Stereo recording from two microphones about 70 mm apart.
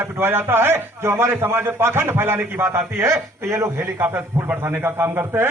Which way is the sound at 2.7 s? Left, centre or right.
Right.